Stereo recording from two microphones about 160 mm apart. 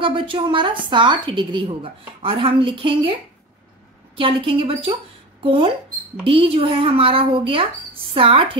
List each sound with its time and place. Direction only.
0.0 s a woman's voice: 30° right (ahead or behind)
4.2 s a woman's voice: 35° right (ahead or behind)